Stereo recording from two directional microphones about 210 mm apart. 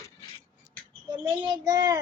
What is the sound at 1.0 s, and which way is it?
Child singing, 20° right (ahead or behind).